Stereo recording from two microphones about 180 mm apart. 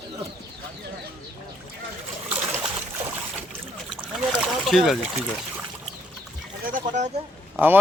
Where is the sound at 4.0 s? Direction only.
Centre (ahead or behind).